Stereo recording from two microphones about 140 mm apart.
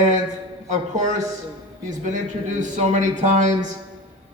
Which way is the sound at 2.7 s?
60° right (ahead or behind).